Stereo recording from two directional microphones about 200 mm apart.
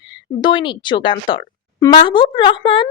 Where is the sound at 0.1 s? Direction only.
25° left (ahead or behind).